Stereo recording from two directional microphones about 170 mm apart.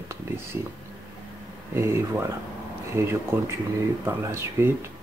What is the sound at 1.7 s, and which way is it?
Speech, 15° right (ahead or behind).